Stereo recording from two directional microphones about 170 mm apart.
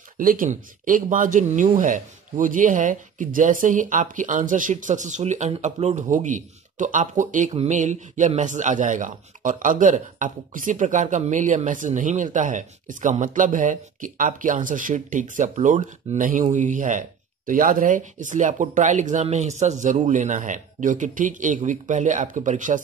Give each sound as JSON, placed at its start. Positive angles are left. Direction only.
{"t": 0.2, "sound": "speech", "side_deg": -55}